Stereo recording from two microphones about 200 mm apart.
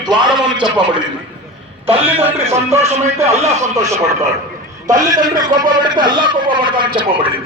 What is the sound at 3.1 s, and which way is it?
Speech, 15° right (ahead or behind).